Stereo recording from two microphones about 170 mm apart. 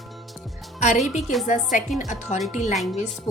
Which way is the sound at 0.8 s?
45° left (ahead or behind).